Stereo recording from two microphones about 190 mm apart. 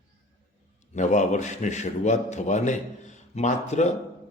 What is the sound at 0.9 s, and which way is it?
Speech, 40° left (ahead or behind).